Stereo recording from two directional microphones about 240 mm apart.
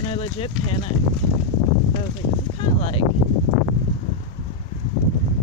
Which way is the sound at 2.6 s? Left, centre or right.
Left.